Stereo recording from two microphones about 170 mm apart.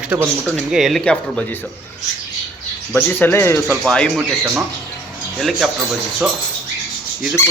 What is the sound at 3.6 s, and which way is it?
Speech, centre (ahead or behind).